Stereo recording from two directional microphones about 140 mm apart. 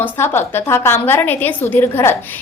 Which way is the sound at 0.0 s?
15° left (ahead or behind).